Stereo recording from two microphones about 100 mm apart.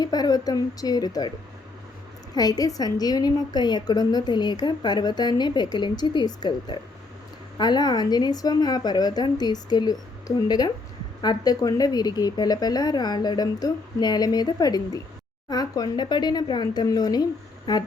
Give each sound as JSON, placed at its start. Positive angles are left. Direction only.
{"t": 0.0, "sound": "speech", "side_deg": 40}
{"t": 2.3, "sound": "a woman's voice", "side_deg": 40}